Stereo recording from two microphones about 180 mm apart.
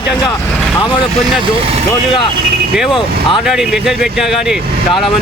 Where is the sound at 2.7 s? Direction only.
Centre (ahead or behind).